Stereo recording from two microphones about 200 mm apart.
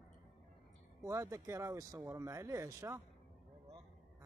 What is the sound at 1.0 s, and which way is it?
Speech, 15° right (ahead or behind).